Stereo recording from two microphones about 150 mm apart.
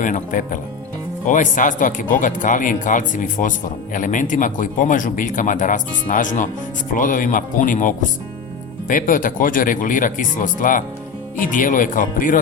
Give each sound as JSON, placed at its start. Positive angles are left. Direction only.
{"t": 0.0, "sound": "a man's voice", "side_deg": 60}